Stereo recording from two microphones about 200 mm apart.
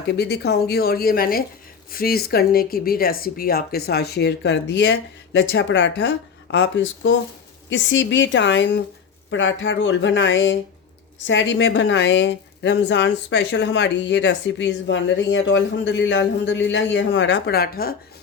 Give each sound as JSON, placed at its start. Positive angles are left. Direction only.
{"t": 0.1, "sound": "a woman's voice", "side_deg": 55}